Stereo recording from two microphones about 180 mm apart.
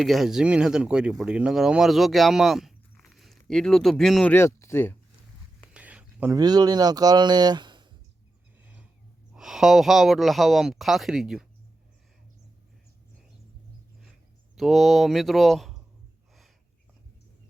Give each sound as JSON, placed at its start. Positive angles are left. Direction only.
{"t": 0.0, "sound": "speech", "side_deg": 0}
{"t": 5.7, "sound": "speech", "side_deg": -5}
{"t": 8.6, "sound": "a sound", "side_deg": -5}
{"t": 9.3, "sound": "speech", "side_deg": -5}
{"t": 14.5, "sound": "speech", "side_deg": 0}